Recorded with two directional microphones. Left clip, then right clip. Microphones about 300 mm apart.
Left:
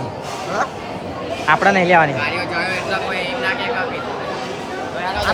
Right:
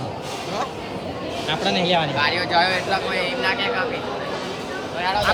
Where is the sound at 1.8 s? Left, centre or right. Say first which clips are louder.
Left 7 dB; left.